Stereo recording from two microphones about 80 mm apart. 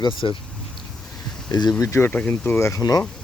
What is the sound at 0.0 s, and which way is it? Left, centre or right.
Speech, left.